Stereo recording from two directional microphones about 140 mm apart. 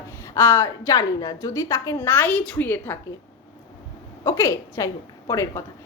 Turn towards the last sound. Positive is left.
turn(degrees=20)  # may be behind; listen again after turning